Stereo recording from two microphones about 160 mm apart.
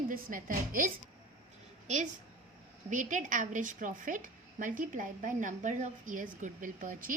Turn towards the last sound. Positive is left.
turn(degrees=-60)  # may be behind; listen again after turning